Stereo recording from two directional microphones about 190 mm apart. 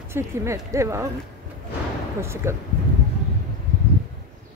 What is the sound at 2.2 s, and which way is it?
Speech, 15° right (ahead or behind).